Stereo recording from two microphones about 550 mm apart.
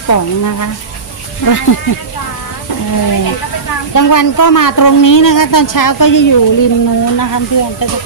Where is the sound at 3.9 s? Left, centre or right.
Left.